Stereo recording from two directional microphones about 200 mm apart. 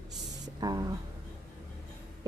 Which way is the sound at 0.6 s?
20° right (ahead or behind).